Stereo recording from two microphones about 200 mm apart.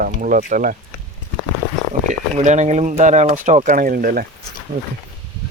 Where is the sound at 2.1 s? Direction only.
35° right (ahead or behind).